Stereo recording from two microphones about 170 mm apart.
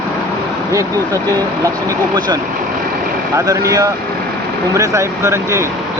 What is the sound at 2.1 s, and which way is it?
Speech, 25° right (ahead or behind).